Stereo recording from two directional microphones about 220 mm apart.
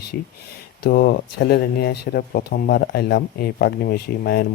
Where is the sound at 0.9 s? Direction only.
45° left (ahead or behind).